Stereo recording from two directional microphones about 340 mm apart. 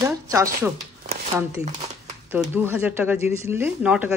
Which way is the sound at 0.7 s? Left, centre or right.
Centre.